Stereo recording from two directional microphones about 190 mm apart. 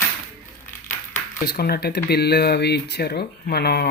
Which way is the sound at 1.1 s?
55° left (ahead or behind).